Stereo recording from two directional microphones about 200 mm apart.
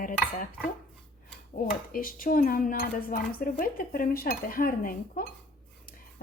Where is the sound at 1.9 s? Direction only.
45° left (ahead or behind).